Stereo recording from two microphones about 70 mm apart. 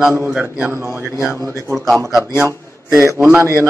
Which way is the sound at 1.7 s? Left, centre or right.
Centre.